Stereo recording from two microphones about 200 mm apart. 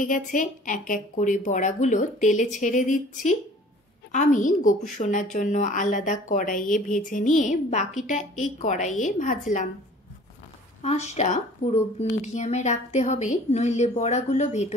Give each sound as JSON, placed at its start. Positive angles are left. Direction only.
{"t": 0.0, "sound": "speech", "side_deg": 40}
{"t": 10.8, "sound": "speech", "side_deg": 35}